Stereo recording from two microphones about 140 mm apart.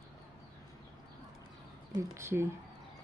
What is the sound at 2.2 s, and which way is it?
Speech, 20° right (ahead or behind).